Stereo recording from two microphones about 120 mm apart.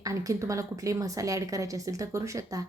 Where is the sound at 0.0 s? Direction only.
25° right (ahead or behind).